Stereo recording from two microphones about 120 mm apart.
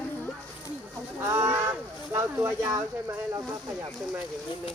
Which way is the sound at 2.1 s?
20° right (ahead or behind).